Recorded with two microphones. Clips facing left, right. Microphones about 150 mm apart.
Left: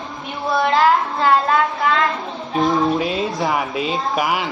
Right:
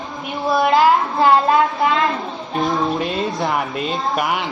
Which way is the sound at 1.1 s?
20° right (ahead or behind).